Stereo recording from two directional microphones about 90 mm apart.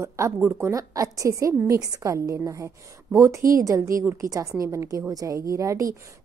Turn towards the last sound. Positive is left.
turn(degrees=-40)  # may be behind; listen again after turning